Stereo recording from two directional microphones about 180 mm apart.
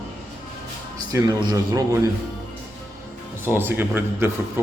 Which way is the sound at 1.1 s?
20° right (ahead or behind).